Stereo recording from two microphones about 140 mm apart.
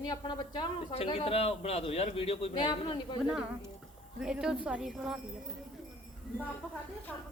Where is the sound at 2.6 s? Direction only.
30° left (ahead or behind).